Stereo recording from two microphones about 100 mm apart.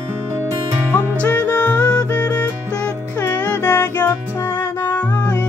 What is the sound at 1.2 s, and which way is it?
Music, 15° left (ahead or behind).